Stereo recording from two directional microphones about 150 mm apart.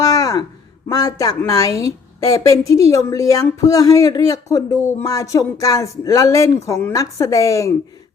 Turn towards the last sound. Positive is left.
turn(degrees=20)  # may be behind; listen again after turning